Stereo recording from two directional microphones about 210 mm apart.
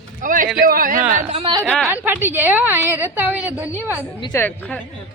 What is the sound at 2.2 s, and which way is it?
A woman's voice, 10° right (ahead or behind).